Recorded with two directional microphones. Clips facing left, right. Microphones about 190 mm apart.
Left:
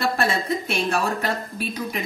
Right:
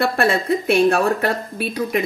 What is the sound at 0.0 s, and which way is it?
A woman's voice, 60° right (ahead or behind).